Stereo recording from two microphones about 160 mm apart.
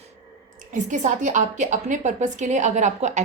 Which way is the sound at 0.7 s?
50° right (ahead or behind).